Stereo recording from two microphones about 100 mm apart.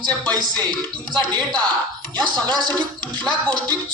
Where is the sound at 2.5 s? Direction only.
45° right (ahead or behind).